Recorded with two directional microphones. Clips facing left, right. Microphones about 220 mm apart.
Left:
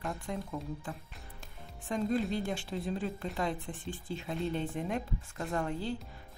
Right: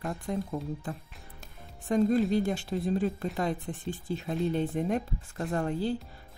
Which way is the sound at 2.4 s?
40° right (ahead or behind).